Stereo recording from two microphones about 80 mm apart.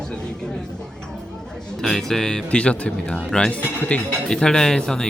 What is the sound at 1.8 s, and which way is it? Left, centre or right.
Speech, centre.